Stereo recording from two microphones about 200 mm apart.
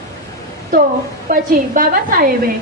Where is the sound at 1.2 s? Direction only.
45° right (ahead or behind).